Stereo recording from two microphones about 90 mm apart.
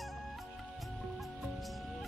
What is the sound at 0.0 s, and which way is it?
Music, centre (ahead or behind).